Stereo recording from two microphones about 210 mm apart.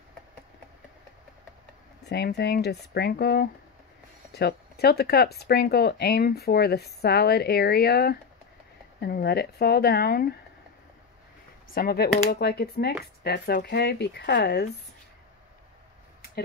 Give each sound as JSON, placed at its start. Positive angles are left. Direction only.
{"t": 2.0, "sound": "speech", "side_deg": 50}
{"t": 11.7, "sound": "speech", "side_deg": 45}